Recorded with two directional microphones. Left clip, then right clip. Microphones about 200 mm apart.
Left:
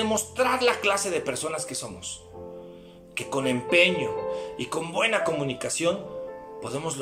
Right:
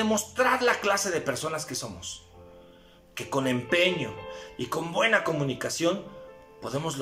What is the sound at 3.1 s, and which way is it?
Speech, 10° left (ahead or behind).